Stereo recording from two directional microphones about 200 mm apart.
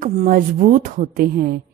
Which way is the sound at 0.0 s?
40° right (ahead or behind).